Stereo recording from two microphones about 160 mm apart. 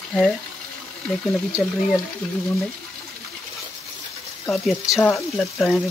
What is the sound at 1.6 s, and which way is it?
Speech, centre (ahead or behind).